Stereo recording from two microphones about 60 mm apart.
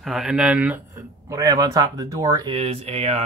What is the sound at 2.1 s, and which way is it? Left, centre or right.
Speech, right.